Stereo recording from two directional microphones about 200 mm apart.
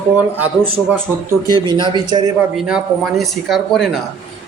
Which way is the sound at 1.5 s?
20° right (ahead or behind).